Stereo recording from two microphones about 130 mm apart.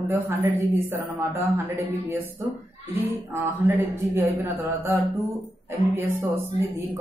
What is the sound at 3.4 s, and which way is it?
Speech, 15° right (ahead or behind).